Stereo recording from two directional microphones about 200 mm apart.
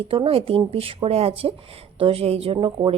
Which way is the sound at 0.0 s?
25° right (ahead or behind).